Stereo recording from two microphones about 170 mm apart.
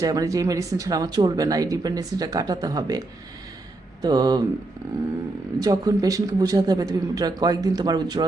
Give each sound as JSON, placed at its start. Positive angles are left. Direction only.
{"t": 0.0, "sound": "speech", "side_deg": -20}
{"t": 4.0, "sound": "speech", "side_deg": -25}
{"t": 5.5, "sound": "speech", "side_deg": -20}